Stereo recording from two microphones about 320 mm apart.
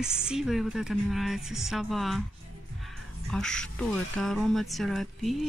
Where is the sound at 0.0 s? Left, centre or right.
Centre.